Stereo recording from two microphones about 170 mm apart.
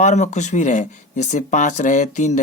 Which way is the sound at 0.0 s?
40° left (ahead or behind).